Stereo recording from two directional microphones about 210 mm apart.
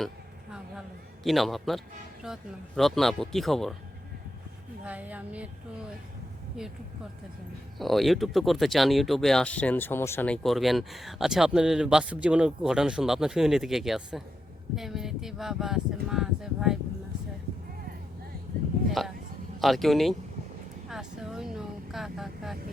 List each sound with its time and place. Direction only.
0.5 s a sound: centre (ahead or behind)
2.2 s speech: centre (ahead or behind)
4.9 s a woman's voice: 5° right (ahead or behind)
7.8 s speech: centre (ahead or behind)
18.9 s speech: centre (ahead or behind)
20.9 s vehicle: centre (ahead or behind)